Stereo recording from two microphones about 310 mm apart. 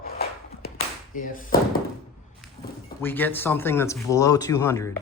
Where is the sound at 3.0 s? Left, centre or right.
Centre.